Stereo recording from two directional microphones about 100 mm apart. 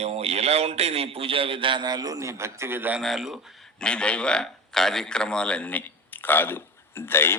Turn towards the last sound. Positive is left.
turn(degrees=25)  # may be behind; listen again after turning